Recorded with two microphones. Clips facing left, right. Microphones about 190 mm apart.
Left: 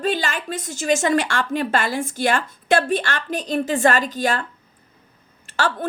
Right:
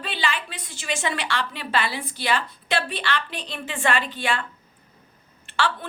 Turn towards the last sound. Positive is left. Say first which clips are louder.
# left 2 dB
turn(degrees=45)  # may be behind; listen again after turning